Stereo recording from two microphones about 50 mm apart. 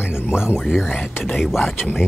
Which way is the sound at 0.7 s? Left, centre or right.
Centre.